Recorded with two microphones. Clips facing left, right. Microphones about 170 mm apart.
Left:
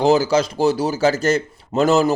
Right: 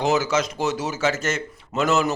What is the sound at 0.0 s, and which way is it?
Speech, 35° left (ahead or behind).